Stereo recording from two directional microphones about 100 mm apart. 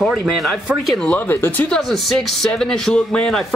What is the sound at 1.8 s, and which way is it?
Speech, centre (ahead or behind).